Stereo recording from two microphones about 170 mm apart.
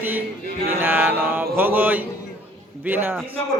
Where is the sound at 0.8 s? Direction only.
10° right (ahead or behind).